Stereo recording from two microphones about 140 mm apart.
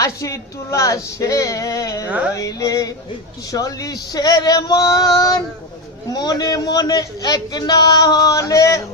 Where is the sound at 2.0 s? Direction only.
10° right (ahead or behind).